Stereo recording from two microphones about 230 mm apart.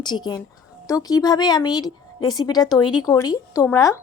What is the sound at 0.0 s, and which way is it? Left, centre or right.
A woman's voice, centre.